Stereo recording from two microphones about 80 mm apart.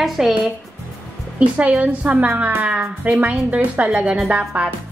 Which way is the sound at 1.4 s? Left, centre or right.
Centre.